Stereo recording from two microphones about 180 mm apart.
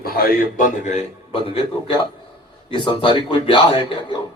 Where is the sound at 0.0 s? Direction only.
55° left (ahead or behind).